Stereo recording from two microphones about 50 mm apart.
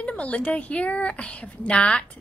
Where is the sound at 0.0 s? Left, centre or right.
Left.